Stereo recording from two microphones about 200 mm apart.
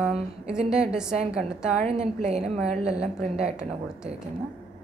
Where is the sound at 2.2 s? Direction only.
30° right (ahead or behind).